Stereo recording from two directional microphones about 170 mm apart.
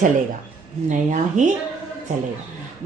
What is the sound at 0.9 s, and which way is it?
Speech, 45° right (ahead or behind).